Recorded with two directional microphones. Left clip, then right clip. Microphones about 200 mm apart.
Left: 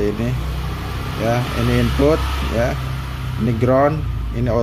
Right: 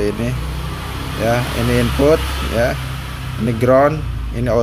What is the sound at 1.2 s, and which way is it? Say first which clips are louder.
Speech: right 3 dB; 10° right (ahead or behind).